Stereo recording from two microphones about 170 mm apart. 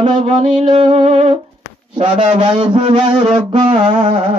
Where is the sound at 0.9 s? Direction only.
40° right (ahead or behind).